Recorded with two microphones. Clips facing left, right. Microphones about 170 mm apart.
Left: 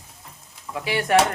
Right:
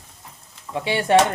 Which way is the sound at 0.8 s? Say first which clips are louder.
Right 3 dB; 25° right (ahead or behind).